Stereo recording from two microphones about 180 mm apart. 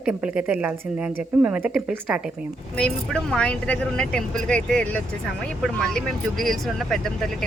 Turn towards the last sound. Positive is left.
turn(degrees=0)  # may be behind; listen again after turning